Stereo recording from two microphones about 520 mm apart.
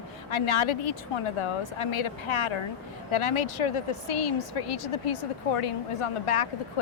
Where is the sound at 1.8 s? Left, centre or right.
Left.